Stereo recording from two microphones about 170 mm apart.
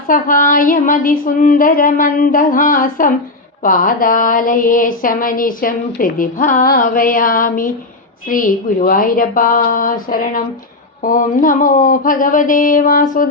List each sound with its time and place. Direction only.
0.1 s a woman's voice: 50° left (ahead or behind)